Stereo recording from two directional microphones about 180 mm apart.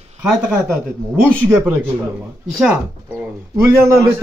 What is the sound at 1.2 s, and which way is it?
Speech, 10° right (ahead or behind).